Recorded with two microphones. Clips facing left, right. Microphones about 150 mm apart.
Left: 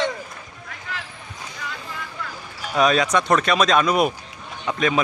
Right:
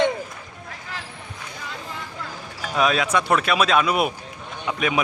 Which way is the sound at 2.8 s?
5° right (ahead or behind).